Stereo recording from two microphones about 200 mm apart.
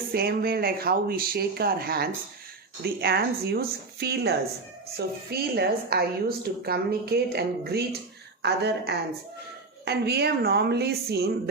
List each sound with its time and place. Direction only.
0.1 s a woman's voice: 50° right (ahead or behind)